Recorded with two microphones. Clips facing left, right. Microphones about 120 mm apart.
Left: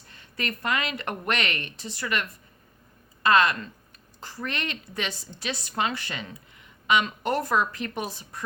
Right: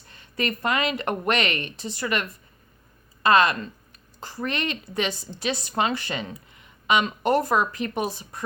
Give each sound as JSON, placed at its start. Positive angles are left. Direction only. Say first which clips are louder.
{"t": 0.1, "sound": "a woman's voice", "louder": "right 5 dB", "side_deg": -25}
{"t": 3.2, "sound": "a woman's voice", "louder": "right 2 dB", "side_deg": -20}